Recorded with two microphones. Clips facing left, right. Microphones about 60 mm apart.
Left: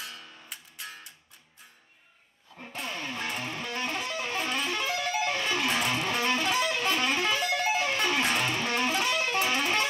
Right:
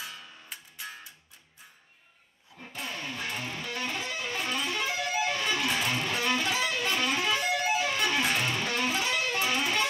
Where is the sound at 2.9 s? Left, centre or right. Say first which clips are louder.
Left 2 dB; left.